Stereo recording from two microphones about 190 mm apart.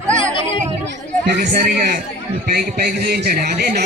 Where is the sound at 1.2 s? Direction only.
65° right (ahead or behind).